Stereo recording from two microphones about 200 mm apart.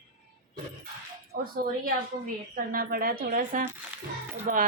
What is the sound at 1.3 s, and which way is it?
Speech, 45° right (ahead or behind).